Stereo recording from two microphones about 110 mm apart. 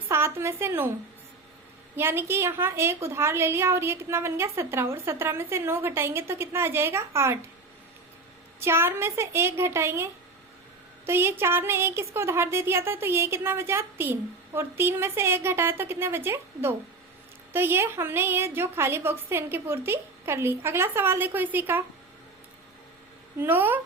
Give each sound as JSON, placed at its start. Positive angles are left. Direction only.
{"t": 0.1, "sound": "a woman's voice", "side_deg": -20}
{"t": 2.0, "sound": "a woman's voice", "side_deg": -20}
{"t": 8.6, "sound": "a woman's voice", "side_deg": -25}
{"t": 23.4, "sound": "speech", "side_deg": -20}